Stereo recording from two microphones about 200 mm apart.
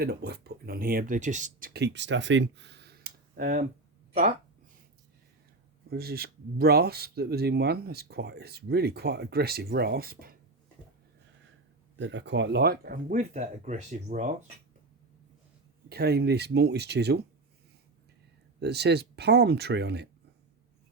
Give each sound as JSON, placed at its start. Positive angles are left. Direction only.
{"t": 0.0, "sound": "speech", "side_deg": -50}
{"t": 5.9, "sound": "speech", "side_deg": -50}
{"t": 11.9, "sound": "speech", "side_deg": -65}
{"t": 15.9, "sound": "speech", "side_deg": -55}
{"t": 18.6, "sound": "speech", "side_deg": -55}